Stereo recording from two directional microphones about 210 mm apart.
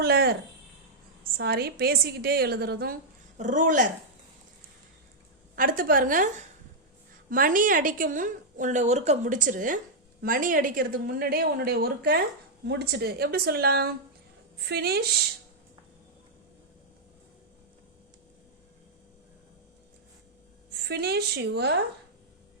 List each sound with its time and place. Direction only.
0.0 s a woman's voice: 45° right (ahead or behind)
5.5 s a woman's voice: 40° right (ahead or behind)
20.7 s a woman's voice: 50° right (ahead or behind)